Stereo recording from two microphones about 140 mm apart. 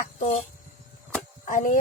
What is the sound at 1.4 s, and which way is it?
Speech, 70° left (ahead or behind).